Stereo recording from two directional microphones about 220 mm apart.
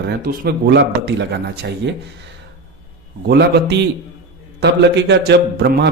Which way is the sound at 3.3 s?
50° right (ahead or behind).